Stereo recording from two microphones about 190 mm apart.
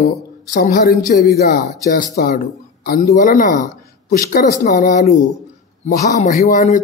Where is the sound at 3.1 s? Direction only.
40° left (ahead or behind).